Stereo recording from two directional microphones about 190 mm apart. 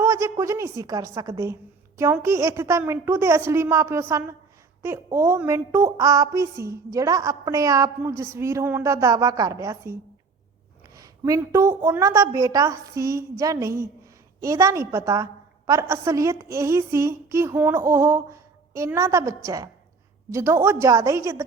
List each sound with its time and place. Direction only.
0.0 s a woman's voice: 15° right (ahead or behind)
20.3 s a woman's voice: 15° right (ahead or behind)